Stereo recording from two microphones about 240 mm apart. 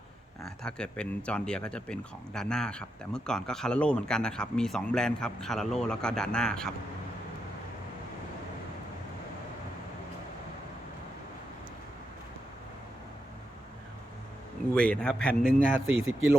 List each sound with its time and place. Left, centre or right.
0.4 s speech: centre
14.8 s speech: centre
15.9 s speech: centre